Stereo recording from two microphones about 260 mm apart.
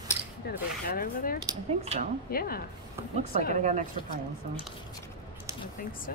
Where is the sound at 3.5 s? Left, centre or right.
Right.